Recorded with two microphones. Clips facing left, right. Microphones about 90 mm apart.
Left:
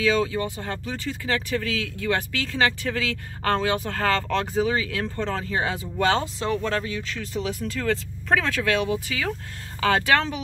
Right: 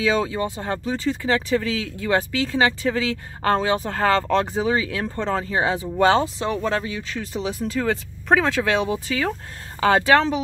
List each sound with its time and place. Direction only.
0.0 s speech: 30° right (ahead or behind)
7.3 s speech: 25° right (ahead or behind)